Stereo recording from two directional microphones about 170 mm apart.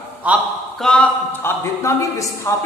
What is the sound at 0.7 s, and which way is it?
A woman's voice, 5° left (ahead or behind).